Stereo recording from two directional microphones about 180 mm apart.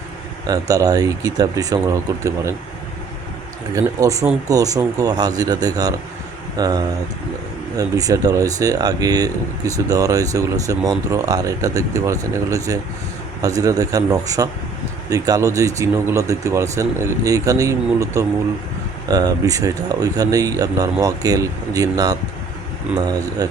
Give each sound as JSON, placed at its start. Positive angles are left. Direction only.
{"t": 0.4, "sound": "speech", "side_deg": -20}
{"t": 3.8, "sound": "speech", "side_deg": -20}
{"t": 23.4, "sound": "speech", "side_deg": -20}